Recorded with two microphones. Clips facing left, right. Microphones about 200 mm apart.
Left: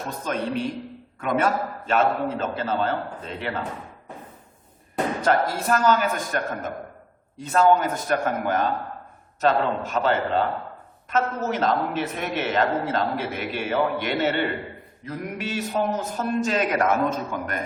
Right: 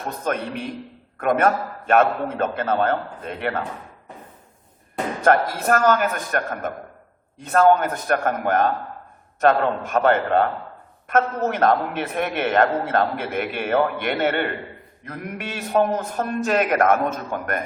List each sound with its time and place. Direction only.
0.3 s a man's voice: 55° right (ahead or behind)
5.2 s a man's voice: 55° right (ahead or behind)